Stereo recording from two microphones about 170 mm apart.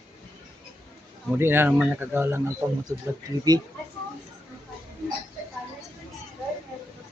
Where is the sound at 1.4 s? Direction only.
10° right (ahead or behind).